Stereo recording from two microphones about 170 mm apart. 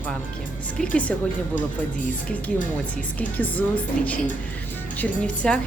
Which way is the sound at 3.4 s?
10° left (ahead or behind).